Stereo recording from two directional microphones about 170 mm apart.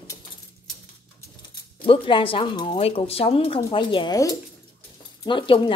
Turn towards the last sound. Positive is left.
turn(degrees=30)  # may be behind; listen again after turning